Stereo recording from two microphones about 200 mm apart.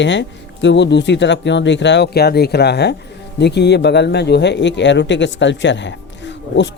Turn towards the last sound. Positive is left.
turn(degrees=60)  # may be behind; listen again after turning